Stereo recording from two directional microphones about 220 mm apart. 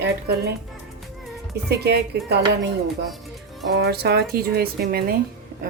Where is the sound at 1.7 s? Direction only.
45° right (ahead or behind).